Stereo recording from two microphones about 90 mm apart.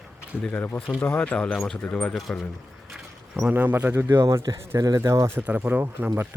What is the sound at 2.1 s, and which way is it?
Speech, centre (ahead or behind).